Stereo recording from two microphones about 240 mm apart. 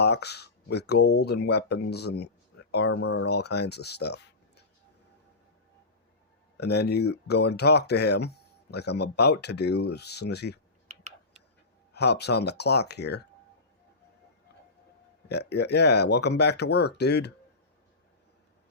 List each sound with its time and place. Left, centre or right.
0.0 s speech: left
3.0 s speech: left
3.2 s speech: left
6.6 s speech: left
11.9 s speech: left
15.3 s speech: left